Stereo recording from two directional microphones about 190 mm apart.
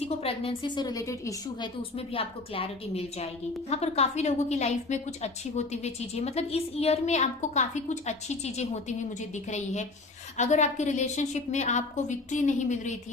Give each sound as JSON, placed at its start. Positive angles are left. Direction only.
{"t": 0.2, "sound": "a woman's voice", "side_deg": 30}
{"t": 1.8, "sound": "a woman's voice", "side_deg": 30}